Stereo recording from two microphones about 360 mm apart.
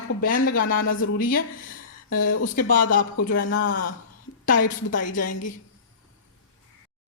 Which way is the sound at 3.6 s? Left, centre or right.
Left.